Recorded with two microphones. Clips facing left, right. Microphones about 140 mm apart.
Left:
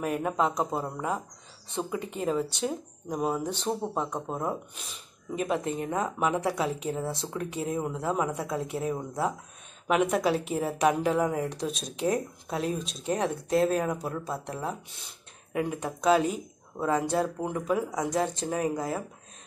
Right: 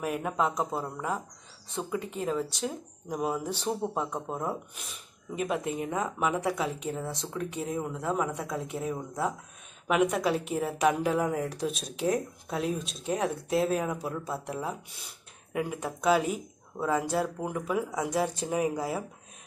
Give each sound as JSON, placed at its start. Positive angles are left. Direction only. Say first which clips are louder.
{"t": 0.0, "sound": "speech", "louder": "left 2 dB", "side_deg": 0}